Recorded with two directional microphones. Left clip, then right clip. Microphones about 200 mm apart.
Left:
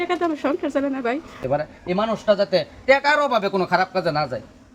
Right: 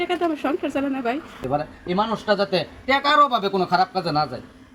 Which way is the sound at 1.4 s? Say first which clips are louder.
Left 2 dB; 50° left (ahead or behind).